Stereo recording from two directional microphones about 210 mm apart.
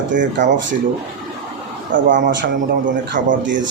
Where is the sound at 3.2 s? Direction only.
40° right (ahead or behind).